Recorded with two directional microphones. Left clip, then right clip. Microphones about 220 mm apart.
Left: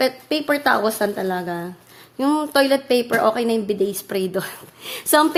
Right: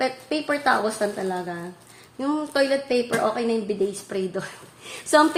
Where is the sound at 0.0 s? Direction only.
50° left (ahead or behind).